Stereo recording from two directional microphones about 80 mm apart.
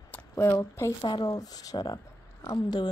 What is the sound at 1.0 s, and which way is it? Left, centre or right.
Speech, left.